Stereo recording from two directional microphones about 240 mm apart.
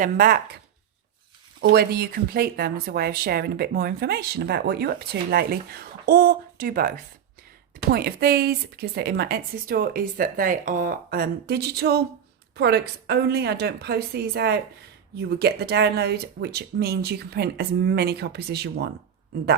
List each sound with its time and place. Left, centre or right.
0.0 s speech: right
1.7 s speech: right